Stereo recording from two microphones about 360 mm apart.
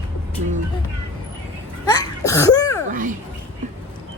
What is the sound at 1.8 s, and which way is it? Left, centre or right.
Sneeze, centre.